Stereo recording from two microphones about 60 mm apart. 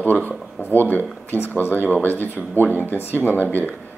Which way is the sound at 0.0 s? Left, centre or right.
Left.